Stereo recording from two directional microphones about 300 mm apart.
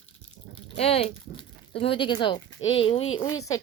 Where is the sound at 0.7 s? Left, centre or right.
Centre.